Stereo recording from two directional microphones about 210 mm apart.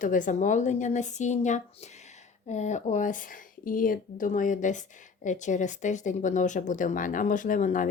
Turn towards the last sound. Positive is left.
turn(degrees=40)  # may be behind; listen again after turning